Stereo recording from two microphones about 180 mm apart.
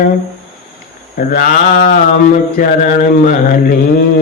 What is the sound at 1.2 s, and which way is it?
Mantra, 50° left (ahead or behind).